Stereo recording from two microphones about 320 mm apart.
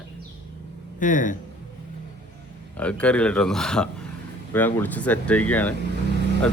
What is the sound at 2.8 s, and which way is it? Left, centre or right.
Speech, centre.